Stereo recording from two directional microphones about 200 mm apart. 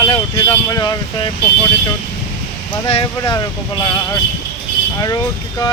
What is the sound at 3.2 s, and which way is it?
Speech, 20° left (ahead or behind).